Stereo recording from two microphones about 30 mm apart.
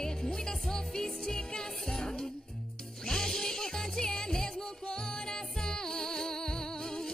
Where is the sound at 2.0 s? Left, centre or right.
Left.